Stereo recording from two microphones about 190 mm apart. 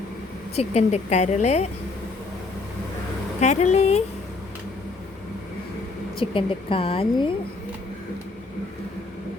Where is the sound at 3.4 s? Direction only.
35° left (ahead or behind).